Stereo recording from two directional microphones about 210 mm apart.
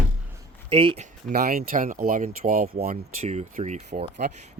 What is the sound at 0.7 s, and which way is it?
Speech, 25° right (ahead or behind).